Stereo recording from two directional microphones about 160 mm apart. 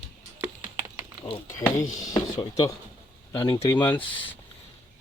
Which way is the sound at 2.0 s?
25° left (ahead or behind).